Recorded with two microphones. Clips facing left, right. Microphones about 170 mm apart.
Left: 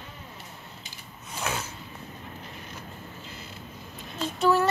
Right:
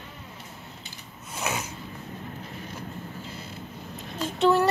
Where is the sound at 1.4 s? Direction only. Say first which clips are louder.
Right 1 dB; 5° right (ahead or behind).